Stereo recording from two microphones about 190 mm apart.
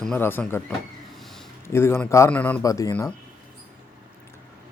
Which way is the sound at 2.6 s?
20° left (ahead or behind).